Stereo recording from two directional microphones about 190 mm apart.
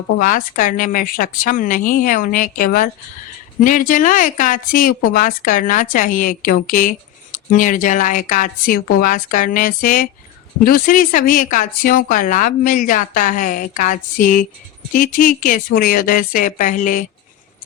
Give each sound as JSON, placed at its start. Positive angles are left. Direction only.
{"t": 0.2, "sound": "speech", "side_deg": 45}